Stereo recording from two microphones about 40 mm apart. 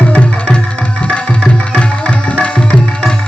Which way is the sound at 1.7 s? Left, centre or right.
Left.